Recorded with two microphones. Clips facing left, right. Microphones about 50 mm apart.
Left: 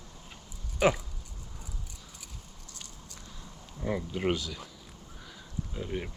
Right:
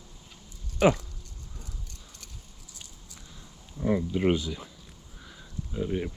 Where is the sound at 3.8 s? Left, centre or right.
Centre.